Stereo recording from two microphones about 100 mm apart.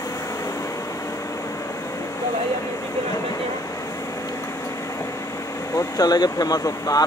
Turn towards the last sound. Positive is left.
turn(degrees=35)  # may be behind; listen again after turning